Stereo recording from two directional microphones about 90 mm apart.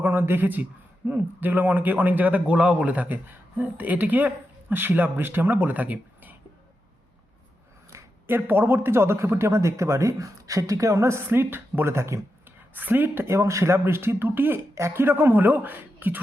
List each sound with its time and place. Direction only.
0.0 s speech: 25° right (ahead or behind)
7.9 s a sound: 30° right (ahead or behind)
8.4 s speech: 20° right (ahead or behind)